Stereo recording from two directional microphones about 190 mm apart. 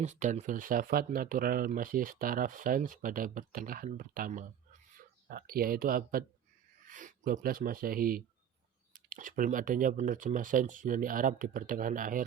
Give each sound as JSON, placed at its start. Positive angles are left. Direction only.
{"t": 0.0, "sound": "speech", "side_deg": -40}